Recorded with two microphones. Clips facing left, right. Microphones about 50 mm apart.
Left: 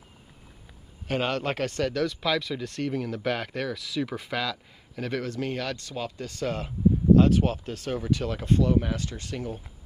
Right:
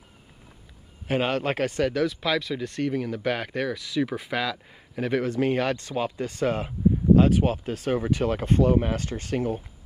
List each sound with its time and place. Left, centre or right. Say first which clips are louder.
1.0 s speech: right 3 dB; centre; by 9.6 s right